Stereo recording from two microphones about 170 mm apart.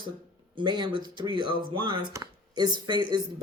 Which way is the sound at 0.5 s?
25° right (ahead or behind).